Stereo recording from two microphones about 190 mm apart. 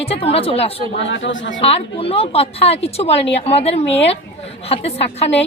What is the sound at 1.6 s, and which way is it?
Speech, 30° left (ahead or behind).